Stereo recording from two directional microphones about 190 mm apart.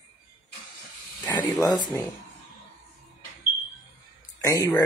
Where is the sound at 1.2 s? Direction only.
20° left (ahead or behind).